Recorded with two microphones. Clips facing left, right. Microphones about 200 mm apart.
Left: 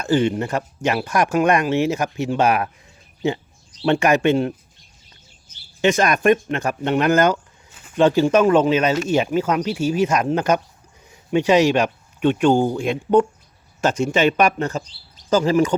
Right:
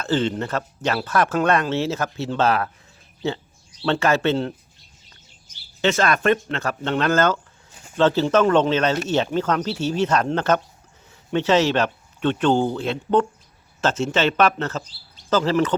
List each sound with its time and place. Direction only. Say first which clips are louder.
0.0 s speech: left 3 dB; 15° left (ahead or behind)
5.8 s a man's voice: left 3 dB; 15° left (ahead or behind)